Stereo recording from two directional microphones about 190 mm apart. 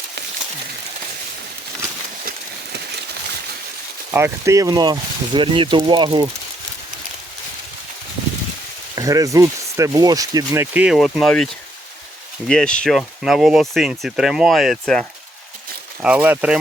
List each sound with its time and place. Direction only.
4.1 s speech: 15° right (ahead or behind)
9.0 s speech: 15° right (ahead or behind); by 11.4 s centre (ahead or behind)
12.5 s speech: 5° left (ahead or behind)